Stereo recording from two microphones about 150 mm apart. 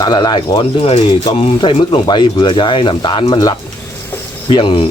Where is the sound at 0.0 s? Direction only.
25° left (ahead or behind).